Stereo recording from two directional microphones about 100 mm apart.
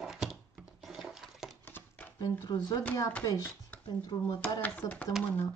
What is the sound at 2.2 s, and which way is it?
Speech, 40° left (ahead or behind).